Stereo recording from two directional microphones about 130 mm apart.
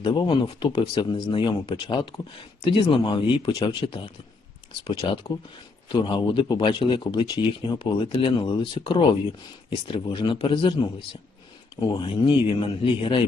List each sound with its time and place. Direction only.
0.0 s speech: 35° left (ahead or behind)